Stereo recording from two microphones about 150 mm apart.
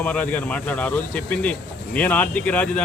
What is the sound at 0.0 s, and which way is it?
Speech, 10° left (ahead or behind).